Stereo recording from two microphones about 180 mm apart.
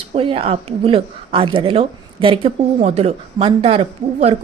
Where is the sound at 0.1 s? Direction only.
30° right (ahead or behind).